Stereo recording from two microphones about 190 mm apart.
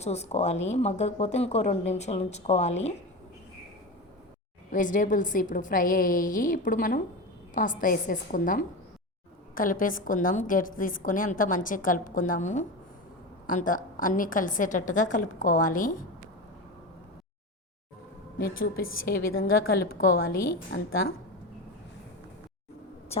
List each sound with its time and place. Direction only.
0.0 s a woman's voice: 35° left (ahead or behind)
4.7 s a woman's voice: 45° left (ahead or behind)
18.3 s a woman's voice: 50° left (ahead or behind)
20.7 s a woman's voice: 75° left (ahead or behind)